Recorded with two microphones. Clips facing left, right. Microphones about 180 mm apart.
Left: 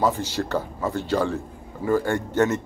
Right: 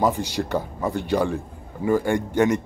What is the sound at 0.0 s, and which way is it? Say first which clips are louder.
A man's voice: right 1 dB; 15° right (ahead or behind).